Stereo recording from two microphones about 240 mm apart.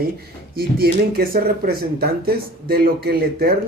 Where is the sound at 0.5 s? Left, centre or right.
Right.